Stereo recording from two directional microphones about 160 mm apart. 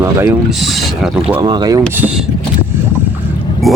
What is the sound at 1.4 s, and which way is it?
Speech, 25° right (ahead or behind).